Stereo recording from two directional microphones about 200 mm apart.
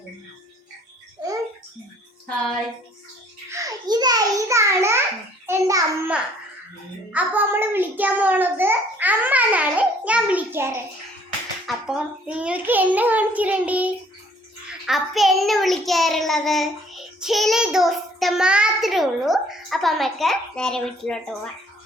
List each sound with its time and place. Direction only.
3.5 s a sound: 15° right (ahead or behind)
5.5 s child singing: 15° right (ahead or behind)
11.6 s a child's voice: 5° right (ahead or behind)
14.7 s child singing: centre (ahead or behind)